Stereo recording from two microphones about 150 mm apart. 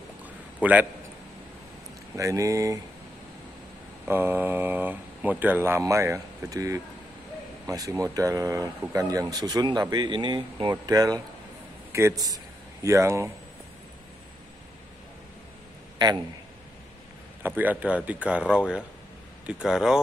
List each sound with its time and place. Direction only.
0.2 s a sound: 10° right (ahead or behind)
2.1 s speech: 20° right (ahead or behind)
4.1 s speech: 15° right (ahead or behind)
17.4 s speech: 10° right (ahead or behind)